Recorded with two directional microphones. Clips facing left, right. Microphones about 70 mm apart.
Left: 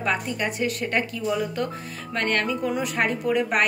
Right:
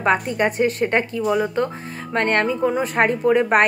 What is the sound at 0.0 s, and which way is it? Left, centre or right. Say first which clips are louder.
A woman's voice: right 7 dB; right.